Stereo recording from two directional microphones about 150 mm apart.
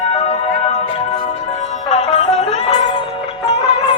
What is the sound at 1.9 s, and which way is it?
Music, 45° left (ahead or behind).